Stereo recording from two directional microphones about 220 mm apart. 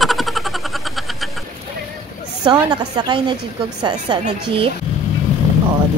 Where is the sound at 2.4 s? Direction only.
20° right (ahead or behind).